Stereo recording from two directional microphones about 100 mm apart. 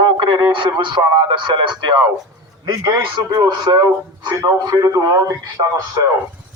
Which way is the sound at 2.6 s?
35° right (ahead or behind).